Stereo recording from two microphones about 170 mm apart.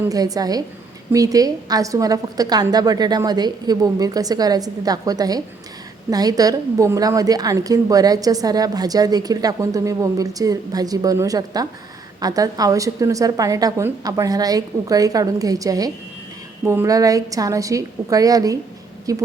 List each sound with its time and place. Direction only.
0.0 s a woman's voice: 20° right (ahead or behind)